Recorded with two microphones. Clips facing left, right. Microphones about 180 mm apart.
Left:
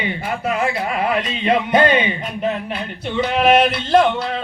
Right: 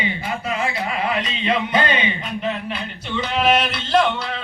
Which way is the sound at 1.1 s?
50° left (ahead or behind).